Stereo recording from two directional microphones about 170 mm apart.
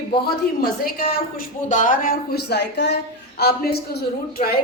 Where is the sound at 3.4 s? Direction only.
65° left (ahead or behind).